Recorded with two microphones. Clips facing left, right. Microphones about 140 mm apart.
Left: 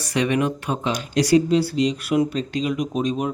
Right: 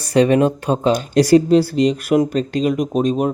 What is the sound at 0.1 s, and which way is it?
Speech, 35° right (ahead or behind).